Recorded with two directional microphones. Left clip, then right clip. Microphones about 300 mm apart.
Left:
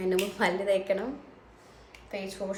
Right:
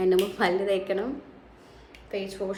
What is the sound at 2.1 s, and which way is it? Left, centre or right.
Speech, centre.